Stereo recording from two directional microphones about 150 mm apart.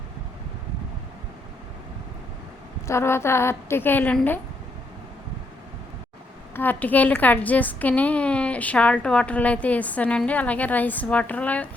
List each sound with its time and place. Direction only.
2.8 s a woman's voice: 15° left (ahead or behind)
6.5 s a woman's voice: 15° left (ahead or behind)